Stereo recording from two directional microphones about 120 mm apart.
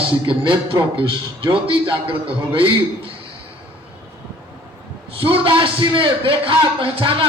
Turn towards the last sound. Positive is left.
turn(degrees=-50)  # may be behind; listen again after turning